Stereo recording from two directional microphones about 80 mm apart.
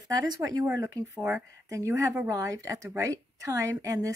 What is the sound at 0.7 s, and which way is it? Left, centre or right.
Speech, right.